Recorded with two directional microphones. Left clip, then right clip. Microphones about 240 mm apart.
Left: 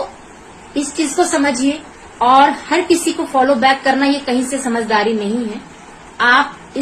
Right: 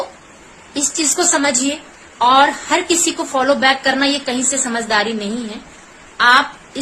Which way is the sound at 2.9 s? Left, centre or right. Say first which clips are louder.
Left 2 dB; centre.